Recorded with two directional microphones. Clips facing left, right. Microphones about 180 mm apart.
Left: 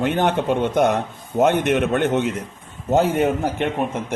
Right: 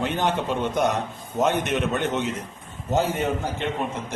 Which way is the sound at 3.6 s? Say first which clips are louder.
Left 6 dB; 60° left (ahead or behind).